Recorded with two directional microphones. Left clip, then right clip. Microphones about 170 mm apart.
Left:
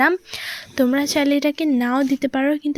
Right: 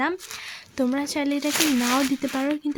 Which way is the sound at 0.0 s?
25° left (ahead or behind).